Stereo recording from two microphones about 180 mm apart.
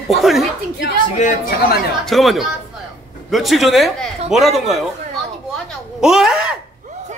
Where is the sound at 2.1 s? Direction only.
Centre (ahead or behind).